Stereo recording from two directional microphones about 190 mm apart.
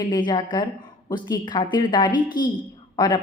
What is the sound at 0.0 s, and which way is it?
A woman's voice, 20° left (ahead or behind).